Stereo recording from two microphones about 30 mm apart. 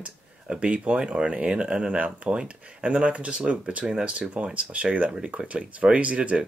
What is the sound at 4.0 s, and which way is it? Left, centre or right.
Speech, right.